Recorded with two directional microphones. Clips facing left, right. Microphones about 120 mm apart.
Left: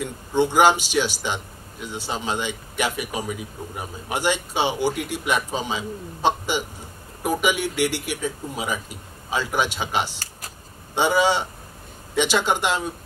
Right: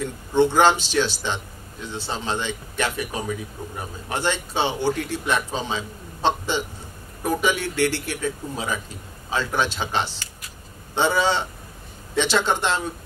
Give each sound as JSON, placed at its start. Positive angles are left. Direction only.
{"t": 0.0, "sound": "a man's voice", "side_deg": 10}
{"t": 10.1, "sound": "computer keyboard", "side_deg": 40}
{"t": 11.0, "sound": "a man's voice", "side_deg": 10}